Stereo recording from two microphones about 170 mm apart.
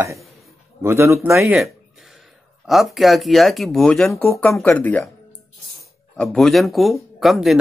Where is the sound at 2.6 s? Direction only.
Centre (ahead or behind).